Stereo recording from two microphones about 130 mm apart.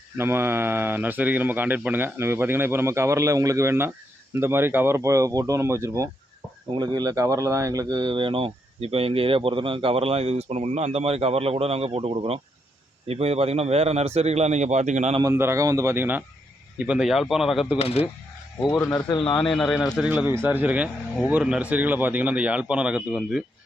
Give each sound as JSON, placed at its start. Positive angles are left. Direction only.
{"t": 0.2, "sound": "speech", "side_deg": -20}
{"t": 15.2, "sound": "speech", "side_deg": -20}
{"t": 17.7, "sound": "speech", "side_deg": 50}
{"t": 18.7, "sound": "speech", "side_deg": 20}
{"t": 19.4, "sound": "speech", "side_deg": 5}
{"t": 20.2, "sound": "speech", "side_deg": -15}